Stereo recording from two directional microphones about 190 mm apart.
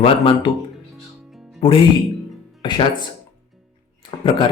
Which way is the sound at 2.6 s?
25° left (ahead or behind).